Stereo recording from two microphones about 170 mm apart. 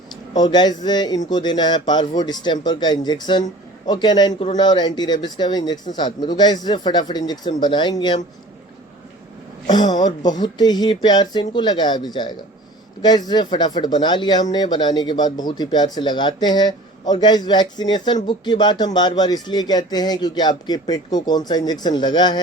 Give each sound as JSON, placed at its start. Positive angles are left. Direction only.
{"t": 0.3, "sound": "speech", "side_deg": 25}
{"t": 9.6, "sound": "speech", "side_deg": 25}